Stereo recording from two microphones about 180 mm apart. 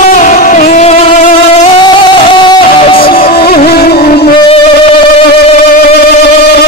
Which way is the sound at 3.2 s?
60° left (ahead or behind).